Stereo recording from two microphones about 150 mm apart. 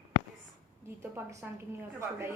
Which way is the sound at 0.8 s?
20° right (ahead or behind).